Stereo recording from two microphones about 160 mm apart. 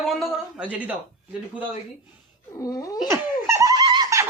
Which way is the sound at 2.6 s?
20° left (ahead or behind).